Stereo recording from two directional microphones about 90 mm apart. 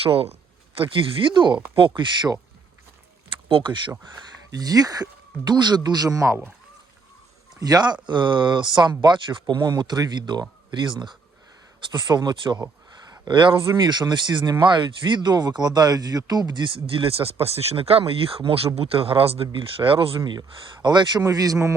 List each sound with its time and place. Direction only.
0.0 s speech: 90° right
0.7 s speech: 75° right (ahead or behind); by 1.5 s 60° right (ahead or behind)
3.5 s speech: 60° right (ahead or behind)
4.5 s speech: 45° right (ahead or behind)
7.6 s speech: 50° right (ahead or behind); by 19.5 s 90° right
19.5 s speech: 75° right (ahead or behind)
20.8 s speech: 55° right (ahead or behind)
21.2 s speech: 40° right (ahead or behind)